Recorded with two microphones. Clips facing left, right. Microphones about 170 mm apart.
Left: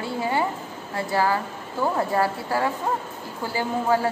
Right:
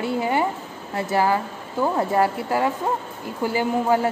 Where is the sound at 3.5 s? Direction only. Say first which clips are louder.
Right 2 dB; 20° right (ahead or behind).